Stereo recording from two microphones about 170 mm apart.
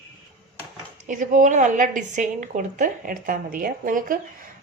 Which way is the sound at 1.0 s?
45° right (ahead or behind).